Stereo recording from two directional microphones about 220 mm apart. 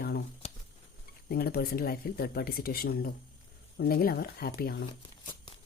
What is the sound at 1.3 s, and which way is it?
Speech, 45° left (ahead or behind).